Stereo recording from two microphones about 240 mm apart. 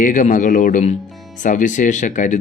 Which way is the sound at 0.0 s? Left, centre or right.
Left.